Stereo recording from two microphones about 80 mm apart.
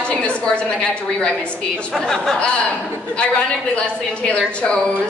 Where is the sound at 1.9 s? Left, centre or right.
Centre.